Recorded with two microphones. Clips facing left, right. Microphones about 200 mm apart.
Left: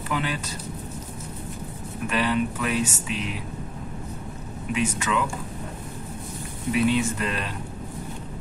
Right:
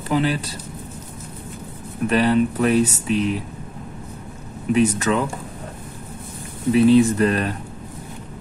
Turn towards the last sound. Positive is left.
turn(degrees=-45)  # may be behind; listen again after turning